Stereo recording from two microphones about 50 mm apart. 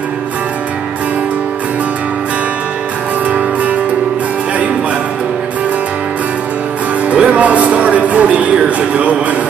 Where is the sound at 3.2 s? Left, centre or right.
Right.